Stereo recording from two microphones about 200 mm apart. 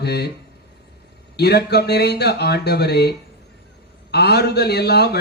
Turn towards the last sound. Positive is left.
turn(degrees=55)  # may be behind; listen again after turning